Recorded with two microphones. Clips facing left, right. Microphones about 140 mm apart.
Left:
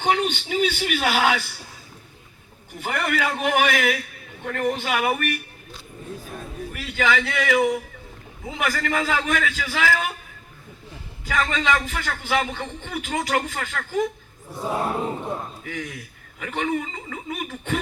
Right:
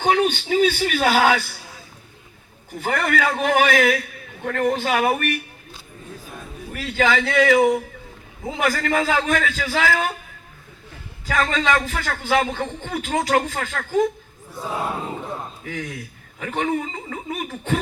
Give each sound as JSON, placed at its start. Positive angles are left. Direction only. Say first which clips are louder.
{"t": 0.0, "sound": "a man's voice", "louder": "right 3 dB", "side_deg": -40}
{"t": 2.7, "sound": "a man's voice", "louder": "right 3 dB", "side_deg": -40}
{"t": 6.7, "sound": "a man's voice", "louder": "right 3 dB", "side_deg": -40}
{"t": 11.3, "sound": "a man's voice", "louder": "right 2 dB", "side_deg": -40}
{"t": 16.4, "sound": "a man's voice", "louder": "right 2 dB", "side_deg": -35}